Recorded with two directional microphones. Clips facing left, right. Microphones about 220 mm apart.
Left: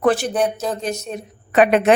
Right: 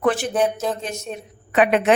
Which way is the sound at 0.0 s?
35° left (ahead or behind).